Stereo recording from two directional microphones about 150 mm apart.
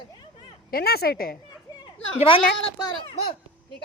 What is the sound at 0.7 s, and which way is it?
Speech, 90° left.